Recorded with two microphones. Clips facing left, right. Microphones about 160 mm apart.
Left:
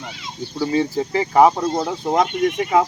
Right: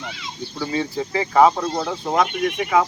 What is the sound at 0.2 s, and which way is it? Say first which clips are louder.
Speech: left 7 dB; 35° left (ahead or behind).